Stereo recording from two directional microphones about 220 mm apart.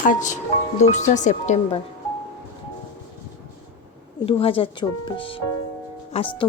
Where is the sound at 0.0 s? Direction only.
35° left (ahead or behind).